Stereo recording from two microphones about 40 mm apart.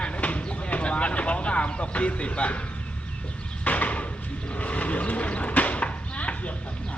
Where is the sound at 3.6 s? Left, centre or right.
Left.